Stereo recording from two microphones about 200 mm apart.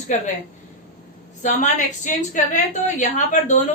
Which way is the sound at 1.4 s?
40° left (ahead or behind).